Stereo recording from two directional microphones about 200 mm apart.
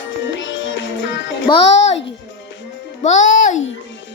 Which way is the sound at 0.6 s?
70° left (ahead or behind).